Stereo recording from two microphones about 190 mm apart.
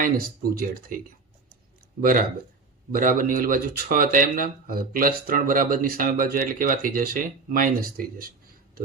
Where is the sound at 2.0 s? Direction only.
50° right (ahead or behind).